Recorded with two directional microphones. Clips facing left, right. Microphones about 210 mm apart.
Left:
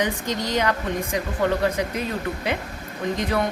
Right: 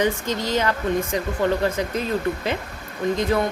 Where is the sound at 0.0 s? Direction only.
15° left (ahead or behind).